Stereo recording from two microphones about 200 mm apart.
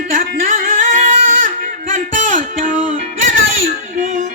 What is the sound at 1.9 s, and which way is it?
Music, 40° right (ahead or behind).